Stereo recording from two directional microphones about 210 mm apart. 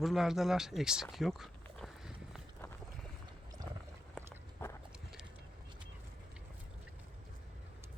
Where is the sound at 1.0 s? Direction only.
Centre (ahead or behind).